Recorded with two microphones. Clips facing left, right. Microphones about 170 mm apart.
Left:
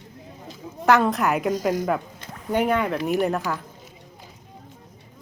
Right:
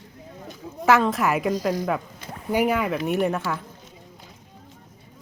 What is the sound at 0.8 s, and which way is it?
Speech, centre (ahead or behind).